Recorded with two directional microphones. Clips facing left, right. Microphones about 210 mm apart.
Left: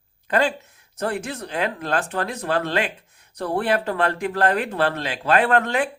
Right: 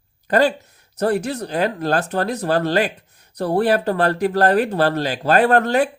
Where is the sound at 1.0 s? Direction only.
40° right (ahead or behind).